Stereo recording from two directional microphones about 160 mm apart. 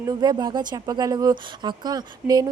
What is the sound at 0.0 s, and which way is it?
Speech, 25° right (ahead or behind).